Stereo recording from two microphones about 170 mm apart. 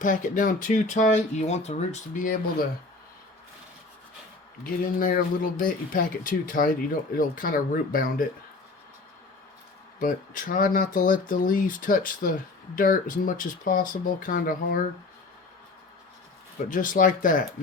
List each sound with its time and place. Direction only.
0.0 s speech: 50° left (ahead or behind)
4.9 s speech: 55° left (ahead or behind)
10.0 s speech: 55° left (ahead or behind)
16.6 s speech: 50° left (ahead or behind)